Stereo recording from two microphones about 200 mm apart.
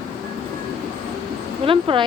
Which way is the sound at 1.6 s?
25° right (ahead or behind).